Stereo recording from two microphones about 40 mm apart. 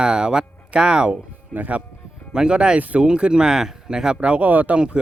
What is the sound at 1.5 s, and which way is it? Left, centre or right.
Speech, right.